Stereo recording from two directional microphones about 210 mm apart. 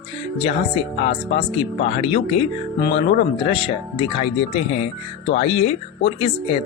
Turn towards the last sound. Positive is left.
turn(degrees=25)  # may be behind; listen again after turning